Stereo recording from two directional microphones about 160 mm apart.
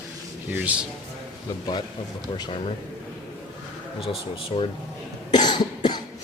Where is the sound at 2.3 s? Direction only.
25° left (ahead or behind).